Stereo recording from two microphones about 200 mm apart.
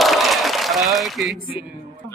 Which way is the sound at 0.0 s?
Centre (ahead or behind).